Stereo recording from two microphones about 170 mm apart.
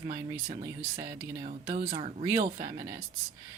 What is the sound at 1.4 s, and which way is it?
Speech, 40° right (ahead or behind).